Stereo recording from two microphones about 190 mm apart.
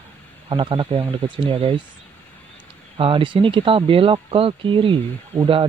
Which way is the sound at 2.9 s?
30° right (ahead or behind).